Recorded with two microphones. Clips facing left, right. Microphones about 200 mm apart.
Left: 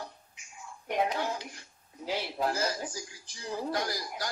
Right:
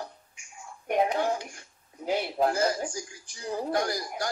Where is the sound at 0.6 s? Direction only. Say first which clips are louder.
Right 4 dB; 30° right (ahead or behind).